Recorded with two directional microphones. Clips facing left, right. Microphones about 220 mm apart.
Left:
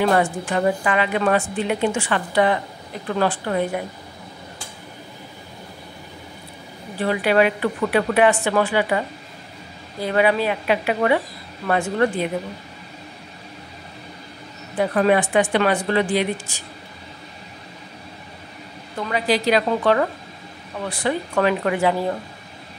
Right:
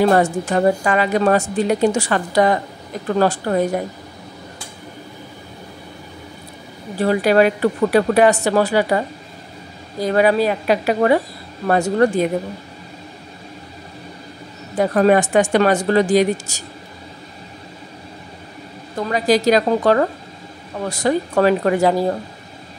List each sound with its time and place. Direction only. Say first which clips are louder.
0.0 s a woman's voice: right 4 dB; 40° right (ahead or behind)
7.0 s a woman's voice: right 4 dB; 40° right (ahead or behind)
14.8 s speech: right 4 dB; 40° right (ahead or behind)
18.9 s a woman's voice: right 5 dB; 40° right (ahead or behind)